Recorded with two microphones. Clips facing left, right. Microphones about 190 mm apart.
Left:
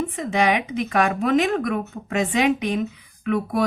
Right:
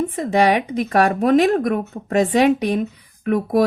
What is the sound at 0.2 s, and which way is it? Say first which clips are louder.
A woman's voice: right 4 dB; 35° right (ahead or behind).